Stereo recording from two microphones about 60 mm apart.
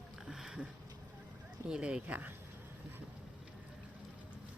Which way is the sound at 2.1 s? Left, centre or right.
Right.